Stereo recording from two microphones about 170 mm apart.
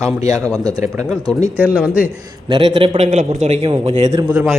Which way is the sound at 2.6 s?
40° right (ahead or behind).